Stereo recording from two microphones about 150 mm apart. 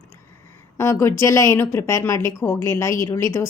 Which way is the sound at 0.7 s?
20° left (ahead or behind).